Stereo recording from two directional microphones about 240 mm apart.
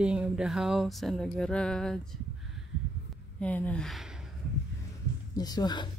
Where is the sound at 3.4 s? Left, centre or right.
Centre.